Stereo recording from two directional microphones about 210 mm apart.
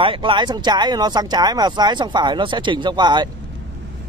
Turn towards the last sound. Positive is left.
turn(degrees=-20)  # may be behind; listen again after turning